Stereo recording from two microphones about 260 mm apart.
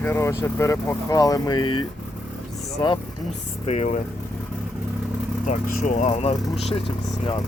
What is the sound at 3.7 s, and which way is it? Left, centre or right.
Speech, left.